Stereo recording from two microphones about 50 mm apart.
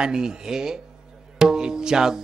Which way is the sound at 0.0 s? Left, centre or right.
Centre.